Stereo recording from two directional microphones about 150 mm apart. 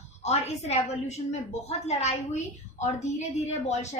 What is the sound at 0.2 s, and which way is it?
A woman's voice, 50° left (ahead or behind).